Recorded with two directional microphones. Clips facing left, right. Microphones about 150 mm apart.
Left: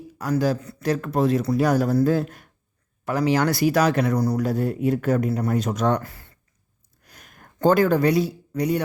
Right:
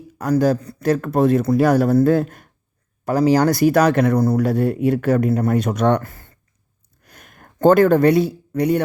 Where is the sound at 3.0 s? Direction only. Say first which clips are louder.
Right 5 dB; 40° right (ahead or behind); by 6.1 s 60° right (ahead or behind).